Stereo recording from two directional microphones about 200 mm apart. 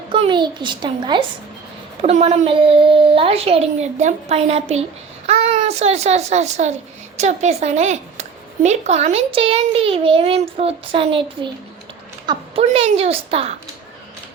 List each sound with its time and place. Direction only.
0.1 s a child's voice: 25° right (ahead or behind)
2.0 s a woman's voice: 35° right (ahead or behind)
12.2 s a woman's voice: 25° right (ahead or behind)